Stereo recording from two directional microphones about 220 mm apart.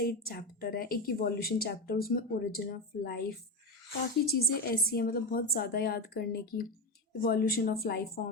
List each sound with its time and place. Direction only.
0.0 s speech: 45° left (ahead or behind)